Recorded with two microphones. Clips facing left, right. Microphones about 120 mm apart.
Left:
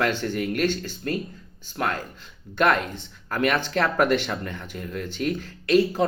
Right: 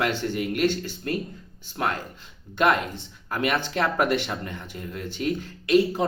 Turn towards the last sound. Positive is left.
turn(degrees=-15)  # may be behind; listen again after turning